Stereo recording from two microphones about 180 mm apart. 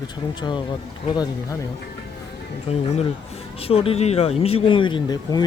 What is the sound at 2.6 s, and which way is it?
Speech, 35° left (ahead or behind).